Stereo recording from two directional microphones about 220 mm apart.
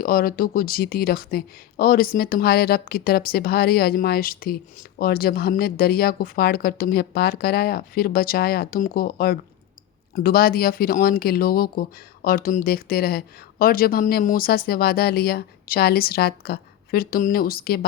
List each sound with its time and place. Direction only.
0.0 s speech: 40° left (ahead or behind)